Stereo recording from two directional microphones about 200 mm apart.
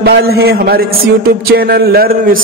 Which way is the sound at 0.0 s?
50° right (ahead or behind).